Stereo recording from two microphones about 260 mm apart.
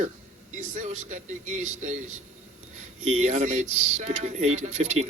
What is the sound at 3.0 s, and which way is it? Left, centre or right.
A man's voice, right.